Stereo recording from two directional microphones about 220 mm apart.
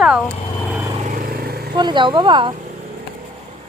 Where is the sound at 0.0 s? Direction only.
5° right (ahead or behind).